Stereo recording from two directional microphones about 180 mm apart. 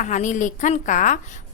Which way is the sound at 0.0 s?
40° left (ahead or behind).